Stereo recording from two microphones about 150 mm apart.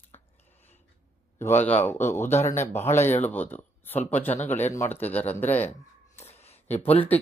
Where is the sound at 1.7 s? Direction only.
15° left (ahead or behind).